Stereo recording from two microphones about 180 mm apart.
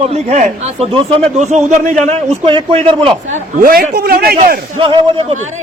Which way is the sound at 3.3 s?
50° right (ahead or behind).